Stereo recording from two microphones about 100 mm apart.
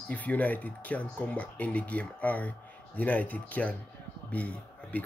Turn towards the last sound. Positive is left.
turn(degrees=15)  # may be behind; listen again after turning